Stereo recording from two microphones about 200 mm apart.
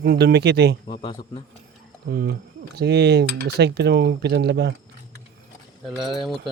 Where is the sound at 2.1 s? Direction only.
50° right (ahead or behind).